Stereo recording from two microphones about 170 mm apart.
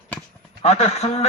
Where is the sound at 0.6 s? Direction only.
40° left (ahead or behind).